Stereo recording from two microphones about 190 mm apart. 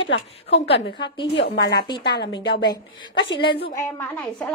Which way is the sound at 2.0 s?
60° left (ahead or behind).